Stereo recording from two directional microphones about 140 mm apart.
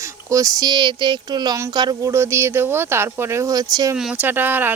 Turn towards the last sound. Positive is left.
turn(degrees=-15)  # may be behind; listen again after turning